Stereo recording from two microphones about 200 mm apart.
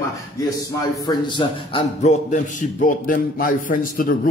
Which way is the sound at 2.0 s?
35° left (ahead or behind).